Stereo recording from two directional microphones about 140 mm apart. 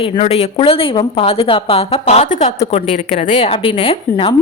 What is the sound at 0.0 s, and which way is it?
A woman's voice, 45° left (ahead or behind).